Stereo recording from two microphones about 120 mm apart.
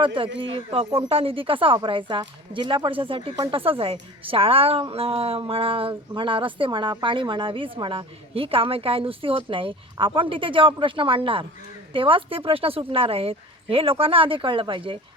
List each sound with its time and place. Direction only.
0.2 s a woman's voice: 50° right (ahead or behind)